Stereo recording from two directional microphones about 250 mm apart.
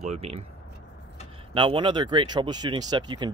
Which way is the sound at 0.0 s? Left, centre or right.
Right.